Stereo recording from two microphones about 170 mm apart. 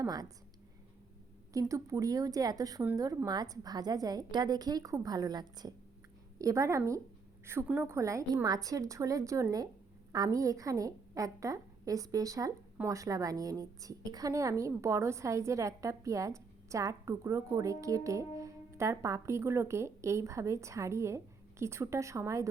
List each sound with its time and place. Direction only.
0.0 s a woman's voice: 20° right (ahead or behind)
1.5 s a woman's voice: 20° right (ahead or behind)